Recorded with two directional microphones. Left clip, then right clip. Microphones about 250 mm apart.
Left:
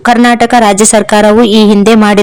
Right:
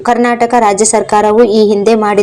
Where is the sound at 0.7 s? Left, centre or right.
Left.